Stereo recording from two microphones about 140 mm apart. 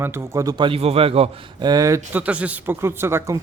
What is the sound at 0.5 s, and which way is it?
Speech, 35° right (ahead or behind).